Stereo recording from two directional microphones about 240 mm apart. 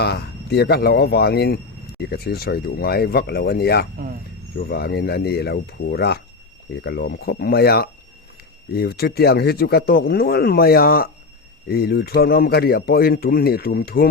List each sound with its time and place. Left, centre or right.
0.0 s speech: left